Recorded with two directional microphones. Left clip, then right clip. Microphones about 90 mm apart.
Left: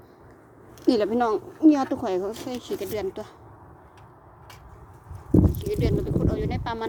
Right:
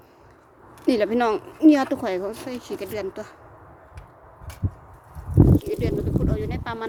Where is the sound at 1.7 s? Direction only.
50° right (ahead or behind).